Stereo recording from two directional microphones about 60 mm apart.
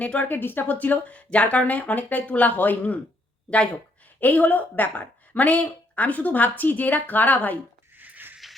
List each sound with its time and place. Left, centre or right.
0.0 s speech: left
0.3 s speech: left
4.2 s speech: left
7.9 s a sound: right